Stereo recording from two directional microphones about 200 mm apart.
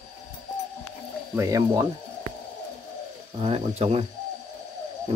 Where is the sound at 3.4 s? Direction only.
30° right (ahead or behind).